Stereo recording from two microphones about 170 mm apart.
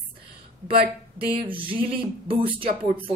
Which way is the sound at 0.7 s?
30° right (ahead or behind).